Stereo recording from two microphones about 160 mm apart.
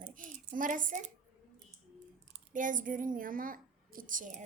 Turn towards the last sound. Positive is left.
turn(degrees=-50)  # may be behind; listen again after turning